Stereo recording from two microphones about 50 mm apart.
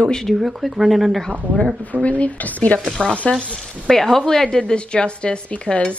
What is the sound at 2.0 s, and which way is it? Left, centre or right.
Speech, left.